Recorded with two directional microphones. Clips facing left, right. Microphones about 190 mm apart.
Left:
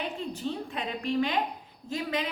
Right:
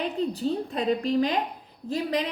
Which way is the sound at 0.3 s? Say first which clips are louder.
Right 6 dB; 35° right (ahead or behind).